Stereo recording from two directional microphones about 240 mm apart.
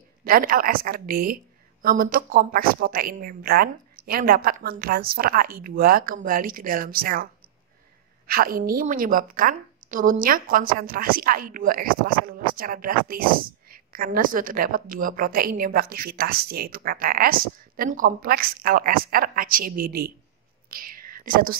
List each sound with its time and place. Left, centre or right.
0.2 s a woman's voice: right
8.3 s a woman's voice: right